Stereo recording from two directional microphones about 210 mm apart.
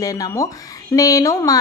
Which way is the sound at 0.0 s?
15° left (ahead or behind).